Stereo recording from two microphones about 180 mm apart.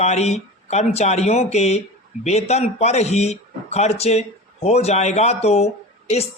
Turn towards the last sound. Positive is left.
turn(degrees=35)  # may be behind; listen again after turning